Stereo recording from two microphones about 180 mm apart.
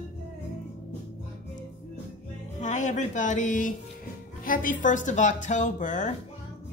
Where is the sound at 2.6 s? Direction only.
40° left (ahead or behind).